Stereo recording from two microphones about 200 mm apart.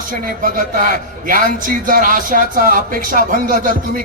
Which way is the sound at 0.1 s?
45° right (ahead or behind).